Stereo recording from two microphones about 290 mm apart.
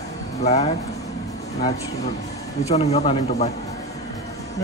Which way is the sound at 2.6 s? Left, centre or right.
Left.